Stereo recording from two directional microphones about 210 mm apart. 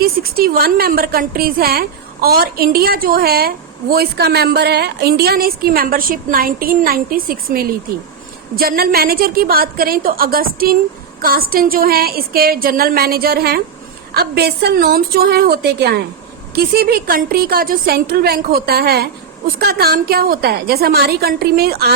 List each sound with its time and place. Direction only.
0.0 s a woman's voice: 45° right (ahead or behind)